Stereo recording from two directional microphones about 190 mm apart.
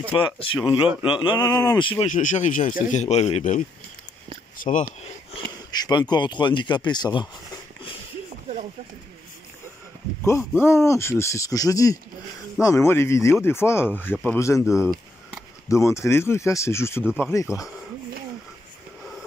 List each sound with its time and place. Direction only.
0.1 s speech: 30° left (ahead or behind)
2.0 s speech: 40° left (ahead or behind)
5.3 s speech: 20° left (ahead or behind)
10.6 s speech: 15° left (ahead or behind)